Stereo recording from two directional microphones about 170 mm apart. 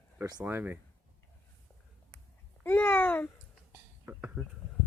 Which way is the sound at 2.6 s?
10° left (ahead or behind).